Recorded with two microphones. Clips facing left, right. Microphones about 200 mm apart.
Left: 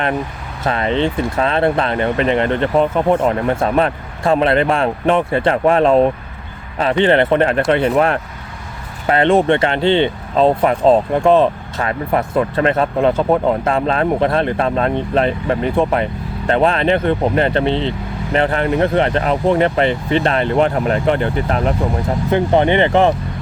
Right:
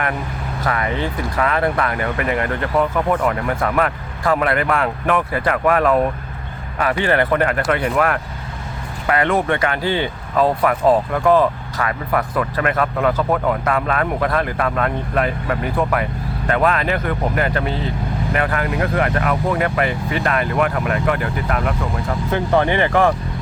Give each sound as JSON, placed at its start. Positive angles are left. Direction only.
{"t": 0.6, "sound": "speech", "side_deg": 25}